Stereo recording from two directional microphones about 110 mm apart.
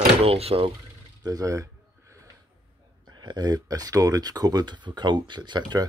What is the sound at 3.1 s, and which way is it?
Speech, 40° right (ahead or behind).